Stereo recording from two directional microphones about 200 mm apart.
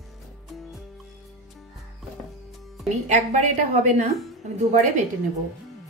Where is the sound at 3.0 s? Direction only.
35° right (ahead or behind).